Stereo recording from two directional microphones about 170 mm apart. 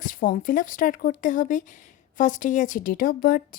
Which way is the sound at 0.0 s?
50° left (ahead or behind).